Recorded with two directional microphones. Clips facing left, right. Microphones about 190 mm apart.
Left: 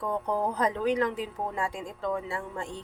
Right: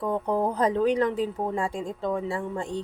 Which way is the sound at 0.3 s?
30° right (ahead or behind).